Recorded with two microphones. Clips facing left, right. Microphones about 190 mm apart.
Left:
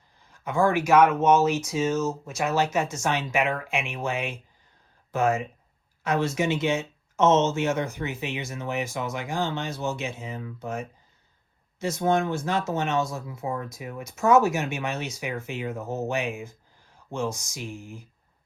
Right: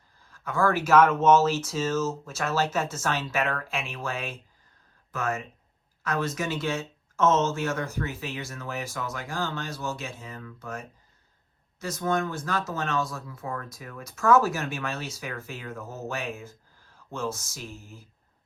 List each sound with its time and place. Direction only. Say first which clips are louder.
0.3 s speech: left 2 dB; 20° left (ahead or behind)
6.1 s speech: left 4 dB; 25° left (ahead or behind)